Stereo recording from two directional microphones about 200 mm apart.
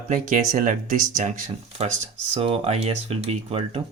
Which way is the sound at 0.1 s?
40° right (ahead or behind).